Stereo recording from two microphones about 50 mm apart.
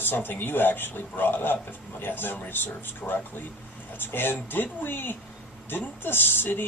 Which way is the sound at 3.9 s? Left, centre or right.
Left.